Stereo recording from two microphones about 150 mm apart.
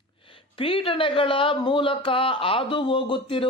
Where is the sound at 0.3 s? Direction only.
35° left (ahead or behind).